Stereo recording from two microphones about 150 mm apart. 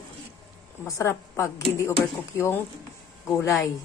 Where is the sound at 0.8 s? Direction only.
20° left (ahead or behind).